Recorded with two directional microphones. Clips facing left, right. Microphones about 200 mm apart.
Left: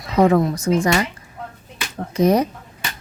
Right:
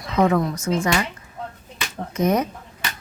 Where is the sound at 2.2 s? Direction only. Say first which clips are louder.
Left 4 dB; 35° left (ahead or behind).